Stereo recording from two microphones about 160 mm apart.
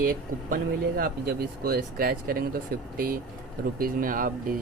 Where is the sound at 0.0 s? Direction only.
60° right (ahead or behind).